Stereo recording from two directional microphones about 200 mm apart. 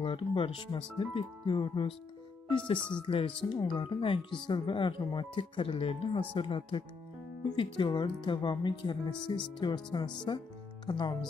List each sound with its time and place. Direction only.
0.0 s speech: 25° left (ahead or behind)
3.0 s speech: 25° left (ahead or behind)